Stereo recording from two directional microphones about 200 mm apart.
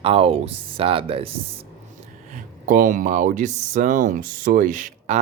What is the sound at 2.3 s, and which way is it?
Speech, 40° right (ahead or behind).